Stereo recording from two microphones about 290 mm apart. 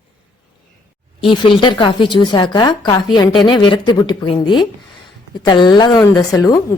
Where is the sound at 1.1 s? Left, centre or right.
Centre.